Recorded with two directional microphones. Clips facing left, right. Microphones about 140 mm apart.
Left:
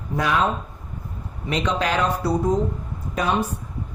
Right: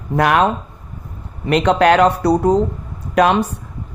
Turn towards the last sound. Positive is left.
turn(degrees=-80)